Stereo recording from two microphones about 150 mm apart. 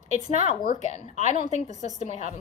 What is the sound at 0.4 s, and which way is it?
A woman's voice, 60° left (ahead or behind).